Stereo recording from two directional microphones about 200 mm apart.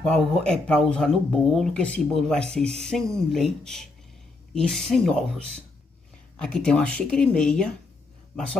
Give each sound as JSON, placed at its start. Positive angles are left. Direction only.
{"t": 0.0, "sound": "speech", "side_deg": 5}
{"t": 6.3, "sound": "speech", "side_deg": 5}